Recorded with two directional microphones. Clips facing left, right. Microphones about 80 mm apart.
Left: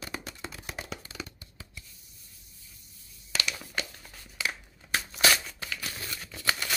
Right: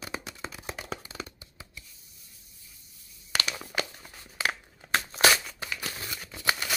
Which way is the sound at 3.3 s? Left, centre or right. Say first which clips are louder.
Right 2 dB; right.